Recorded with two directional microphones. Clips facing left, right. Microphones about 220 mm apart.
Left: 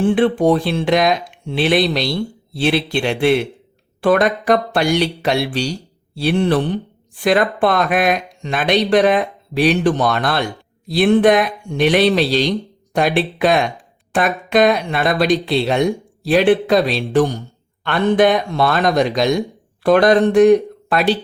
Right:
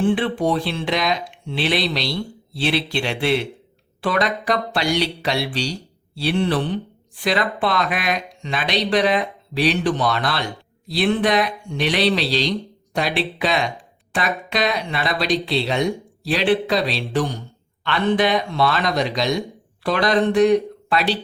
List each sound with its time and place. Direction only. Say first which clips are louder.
0.0 s speech: left 5 dB; 50° left (ahead or behind)